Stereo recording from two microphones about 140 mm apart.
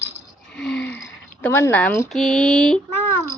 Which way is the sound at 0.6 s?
10° left (ahead or behind).